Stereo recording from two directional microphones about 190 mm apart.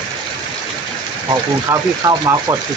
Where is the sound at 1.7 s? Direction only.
20° right (ahead or behind).